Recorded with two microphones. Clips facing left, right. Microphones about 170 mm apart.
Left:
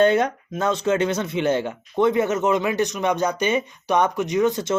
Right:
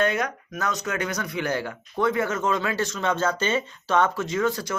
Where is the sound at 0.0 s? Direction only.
30° left (ahead or behind).